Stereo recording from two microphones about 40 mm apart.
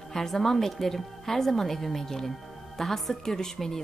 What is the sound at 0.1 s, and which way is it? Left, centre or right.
A woman's voice, centre.